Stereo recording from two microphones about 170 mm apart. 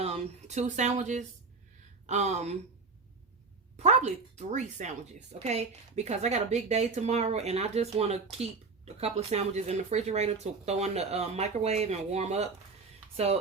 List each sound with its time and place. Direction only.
0.0 s speech: 40° right (ahead or behind)
3.8 s speech: 40° right (ahead or behind)